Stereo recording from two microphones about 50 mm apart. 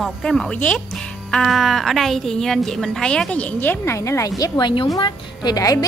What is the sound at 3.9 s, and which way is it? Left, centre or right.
Speech, left.